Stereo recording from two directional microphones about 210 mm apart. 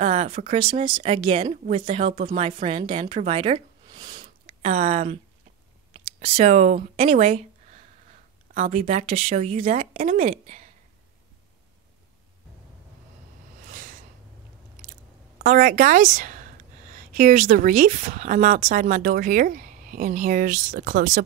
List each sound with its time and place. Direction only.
0.0 s speech: 30° right (ahead or behind)
8.5 s speech: 30° right (ahead or behind)
13.7 s a sound: 40° right (ahead or behind)
15.3 s a woman's voice: 40° right (ahead or behind)